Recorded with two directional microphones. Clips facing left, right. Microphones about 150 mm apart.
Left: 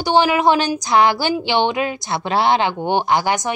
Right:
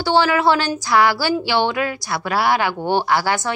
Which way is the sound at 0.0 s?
15° left (ahead or behind).